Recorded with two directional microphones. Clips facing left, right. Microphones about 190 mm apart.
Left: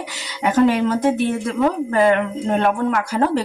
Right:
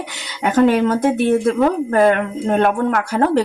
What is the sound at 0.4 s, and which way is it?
Speech, 55° right (ahead or behind).